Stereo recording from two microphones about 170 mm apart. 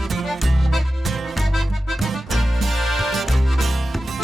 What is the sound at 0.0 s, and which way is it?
Music, centre (ahead or behind).